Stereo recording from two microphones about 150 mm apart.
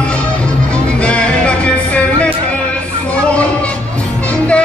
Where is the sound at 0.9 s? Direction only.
5° left (ahead or behind).